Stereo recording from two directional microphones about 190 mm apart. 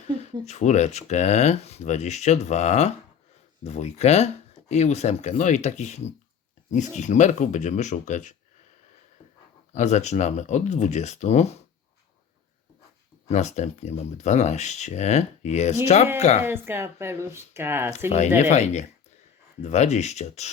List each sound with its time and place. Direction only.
0.2 s speech: 35° left (ahead or behind)
9.7 s speech: 40° left (ahead or behind)
13.2 s speech: 35° left (ahead or behind)
16.4 s speech: 10° right (ahead or behind)
18.3 s speech: 35° left (ahead or behind)